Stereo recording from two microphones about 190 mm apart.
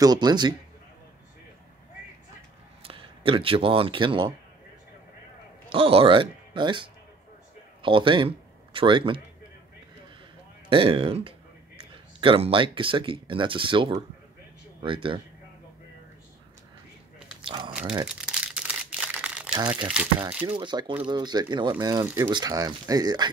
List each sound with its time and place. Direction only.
0.0 s speech: 20° right (ahead or behind)
2.8 s speech: 30° right (ahead or behind)
5.7 s speech: 30° right (ahead or behind)
10.7 s speech: 30° right (ahead or behind)
17.5 s biting: 25° right (ahead or behind)
18.0 s crumpling: 5° right (ahead or behind)
19.9 s speech: 10° right (ahead or behind)
20.4 s speech: 25° right (ahead or behind)